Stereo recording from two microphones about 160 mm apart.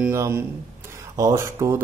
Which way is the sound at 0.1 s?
15° right (ahead or behind).